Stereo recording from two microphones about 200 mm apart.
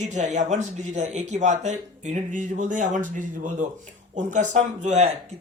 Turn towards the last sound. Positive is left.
turn(degrees=-35)  # may be behind; listen again after turning